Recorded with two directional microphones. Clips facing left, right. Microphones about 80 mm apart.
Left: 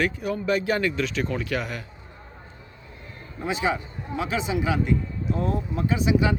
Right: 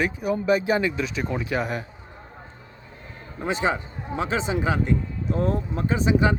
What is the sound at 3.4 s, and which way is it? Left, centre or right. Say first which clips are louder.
A man's voice: right 1 dB; right.